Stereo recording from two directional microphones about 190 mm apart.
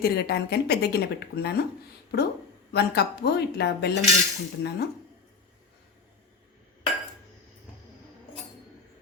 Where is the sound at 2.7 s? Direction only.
60° left (ahead or behind).